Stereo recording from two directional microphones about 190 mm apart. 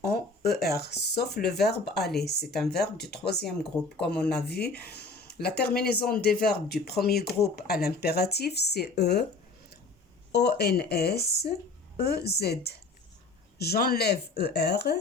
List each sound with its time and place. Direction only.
0.4 s speech: 55° left (ahead or behind)
4.1 s speech: 5° left (ahead or behind)
4.4 s speech: 55° left (ahead or behind)
10.3 s speech: 60° left (ahead or behind)